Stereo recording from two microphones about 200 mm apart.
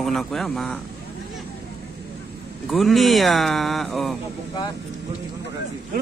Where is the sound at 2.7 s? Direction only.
Centre (ahead or behind).